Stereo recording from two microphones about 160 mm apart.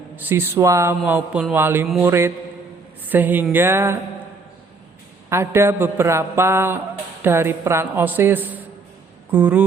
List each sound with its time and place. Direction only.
0.2 s speech: 15° right (ahead or behind)
5.3 s speech: 15° right (ahead or behind)